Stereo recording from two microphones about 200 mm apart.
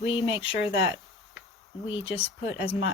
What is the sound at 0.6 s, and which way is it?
Speech, 65° left (ahead or behind).